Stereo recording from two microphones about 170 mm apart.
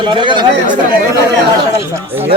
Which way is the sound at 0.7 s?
55° right (ahead or behind).